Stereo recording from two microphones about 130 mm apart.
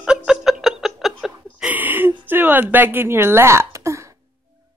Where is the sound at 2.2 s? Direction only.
15° right (ahead or behind).